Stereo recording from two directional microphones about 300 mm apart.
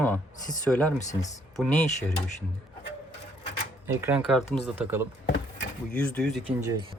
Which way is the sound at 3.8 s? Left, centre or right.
Centre.